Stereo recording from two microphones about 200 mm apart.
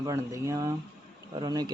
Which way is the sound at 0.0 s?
15° right (ahead or behind).